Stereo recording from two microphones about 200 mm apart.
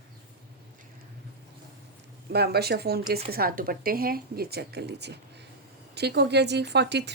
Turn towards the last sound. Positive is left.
turn(degrees=-55)  # may be behind; listen again after turning